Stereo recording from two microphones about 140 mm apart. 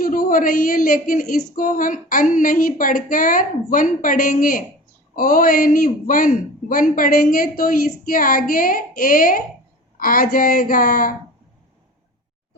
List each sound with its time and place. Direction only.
0.0 s a woman's voice: 90° left